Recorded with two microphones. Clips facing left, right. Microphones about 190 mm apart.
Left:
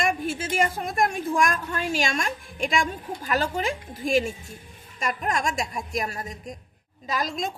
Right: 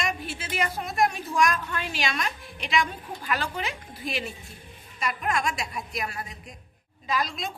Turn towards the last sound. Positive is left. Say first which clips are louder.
# left 1 dB
turn(degrees=45)  # may be behind; listen again after turning